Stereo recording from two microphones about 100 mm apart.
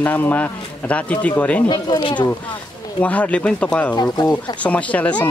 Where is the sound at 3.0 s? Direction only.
15° left (ahead or behind).